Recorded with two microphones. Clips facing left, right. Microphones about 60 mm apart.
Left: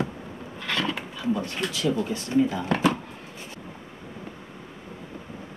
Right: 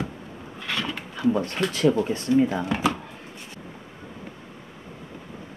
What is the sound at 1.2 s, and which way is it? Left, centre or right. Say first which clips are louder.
Speech: right 5 dB; right.